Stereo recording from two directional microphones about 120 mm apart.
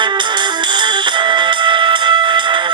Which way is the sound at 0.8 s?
40° right (ahead or behind).